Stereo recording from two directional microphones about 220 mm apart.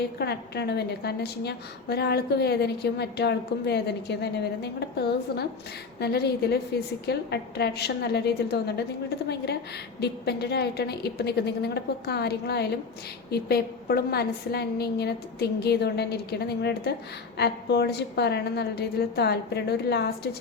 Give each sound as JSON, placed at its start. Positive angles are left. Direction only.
{"t": 0.2, "sound": "a woman's voice", "side_deg": 50}